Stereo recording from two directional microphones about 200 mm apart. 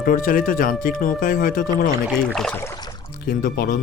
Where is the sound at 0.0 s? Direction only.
45° left (ahead or behind).